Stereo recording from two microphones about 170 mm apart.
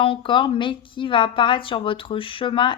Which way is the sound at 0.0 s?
30° left (ahead or behind).